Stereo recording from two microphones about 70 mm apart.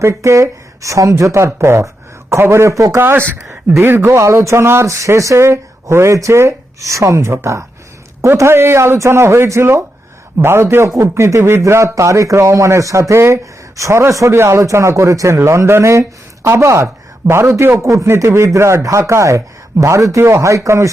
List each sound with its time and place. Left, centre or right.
0.0 s a man's voice: right
17.8 s a man's voice: right